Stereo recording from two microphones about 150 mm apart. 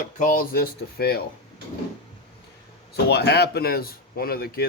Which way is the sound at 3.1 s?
90° left.